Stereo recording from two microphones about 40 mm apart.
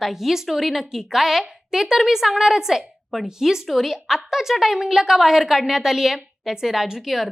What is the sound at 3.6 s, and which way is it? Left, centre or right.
A woman's voice, centre.